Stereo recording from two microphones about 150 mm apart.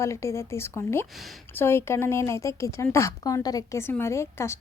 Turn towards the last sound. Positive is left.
turn(degrees=15)  # may be behind; listen again after turning